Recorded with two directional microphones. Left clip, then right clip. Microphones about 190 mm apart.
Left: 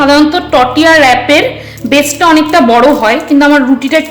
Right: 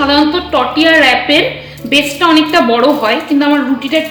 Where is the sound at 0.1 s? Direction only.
50° left (ahead or behind).